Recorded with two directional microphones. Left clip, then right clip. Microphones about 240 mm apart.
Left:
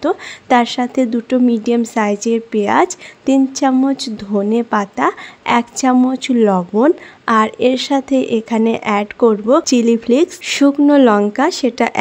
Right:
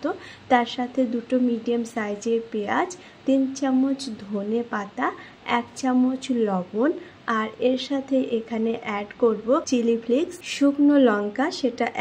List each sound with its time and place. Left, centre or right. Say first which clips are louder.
0.0 s speech: left 11 dB; left